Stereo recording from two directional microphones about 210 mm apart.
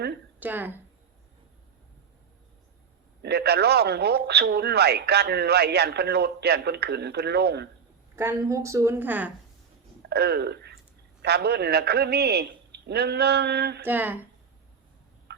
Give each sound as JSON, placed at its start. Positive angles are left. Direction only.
{"t": 0.3, "sound": "speech", "side_deg": -10}
{"t": 3.2, "sound": "speech", "side_deg": -50}
{"t": 8.1, "sound": "a woman's voice", "side_deg": -15}
{"t": 10.0, "sound": "speech", "side_deg": -50}
{"t": 13.8, "sound": "a woman's voice", "side_deg": -10}
{"t": 15.3, "sound": "a sound", "side_deg": -55}